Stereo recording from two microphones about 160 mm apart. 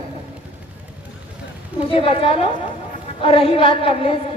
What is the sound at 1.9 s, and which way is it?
Speech, 35° left (ahead or behind).